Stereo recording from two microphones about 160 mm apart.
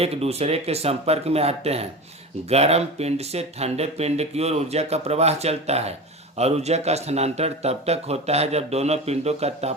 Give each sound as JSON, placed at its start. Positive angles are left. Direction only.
{"t": 0.0, "sound": "speech", "side_deg": -40}